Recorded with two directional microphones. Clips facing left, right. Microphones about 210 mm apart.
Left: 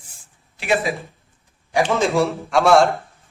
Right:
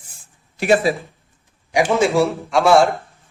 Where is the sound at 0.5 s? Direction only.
40° right (ahead or behind).